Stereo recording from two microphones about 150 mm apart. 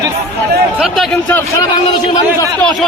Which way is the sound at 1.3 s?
15° left (ahead or behind).